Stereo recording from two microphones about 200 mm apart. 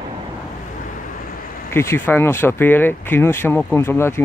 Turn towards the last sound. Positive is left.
turn(degrees=10)  # may be behind; listen again after turning